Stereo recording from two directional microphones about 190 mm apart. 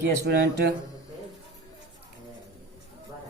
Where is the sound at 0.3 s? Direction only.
55° right (ahead or behind).